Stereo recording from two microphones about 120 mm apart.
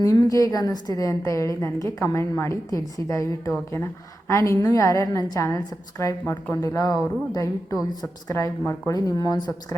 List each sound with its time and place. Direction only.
0.0 s a woman's voice: 30° left (ahead or behind)